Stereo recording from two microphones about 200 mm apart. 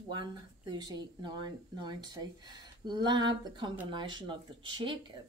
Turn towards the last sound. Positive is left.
turn(degrees=-25)  # may be behind; listen again after turning